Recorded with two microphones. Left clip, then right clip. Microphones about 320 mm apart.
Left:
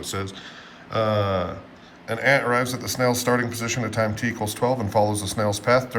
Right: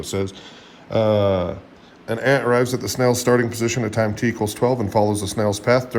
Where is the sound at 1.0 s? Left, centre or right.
Centre.